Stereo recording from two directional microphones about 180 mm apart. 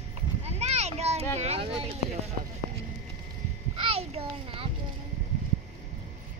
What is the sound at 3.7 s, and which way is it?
Speech, 30° right (ahead or behind).